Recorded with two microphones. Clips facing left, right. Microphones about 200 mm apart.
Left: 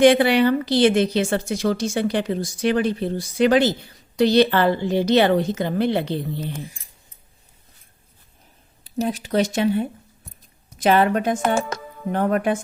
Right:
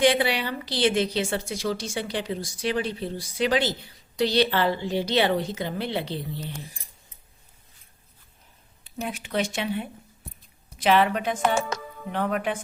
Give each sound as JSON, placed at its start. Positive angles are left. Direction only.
{"t": 0.0, "sound": "a woman's voice", "side_deg": 50}
{"t": 8.8, "sound": "speech", "side_deg": 35}